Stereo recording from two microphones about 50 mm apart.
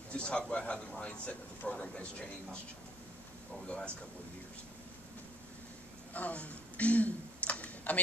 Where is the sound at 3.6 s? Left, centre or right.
Left.